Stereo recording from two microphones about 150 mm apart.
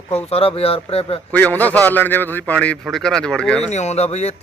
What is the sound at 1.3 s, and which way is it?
A man's voice, 10° left (ahead or behind).